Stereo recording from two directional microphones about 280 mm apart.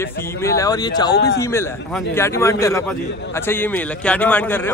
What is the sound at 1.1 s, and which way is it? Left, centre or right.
Speech, left.